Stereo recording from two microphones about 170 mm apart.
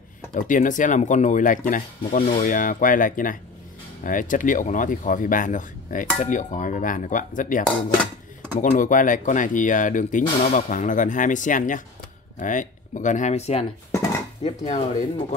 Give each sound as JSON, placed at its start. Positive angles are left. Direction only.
{"t": 0.3, "sound": "speech", "side_deg": 50}